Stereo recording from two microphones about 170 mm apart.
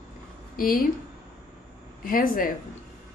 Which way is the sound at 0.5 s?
55° left (ahead or behind).